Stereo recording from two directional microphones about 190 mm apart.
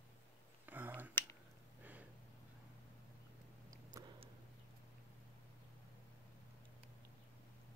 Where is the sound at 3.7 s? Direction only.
20° right (ahead or behind).